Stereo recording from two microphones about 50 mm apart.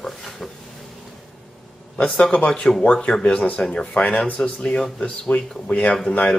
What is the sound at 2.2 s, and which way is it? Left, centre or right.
Speech, left.